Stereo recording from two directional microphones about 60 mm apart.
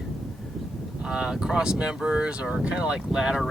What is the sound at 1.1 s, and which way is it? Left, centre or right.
Speech, centre.